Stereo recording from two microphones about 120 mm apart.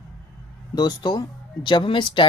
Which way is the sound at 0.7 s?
35° left (ahead or behind).